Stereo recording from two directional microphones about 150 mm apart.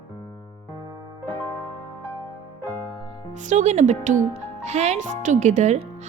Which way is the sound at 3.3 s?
55° right (ahead or behind).